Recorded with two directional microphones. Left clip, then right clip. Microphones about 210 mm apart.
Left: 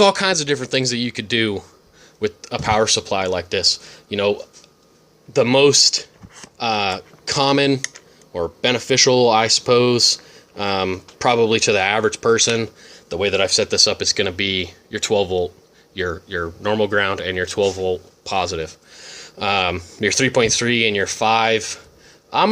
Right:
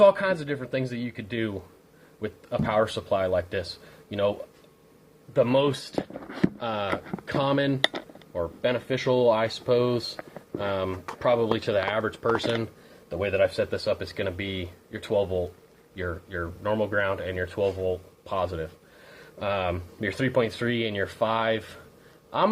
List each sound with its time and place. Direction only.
0.0 s speech: 50° left (ahead or behind)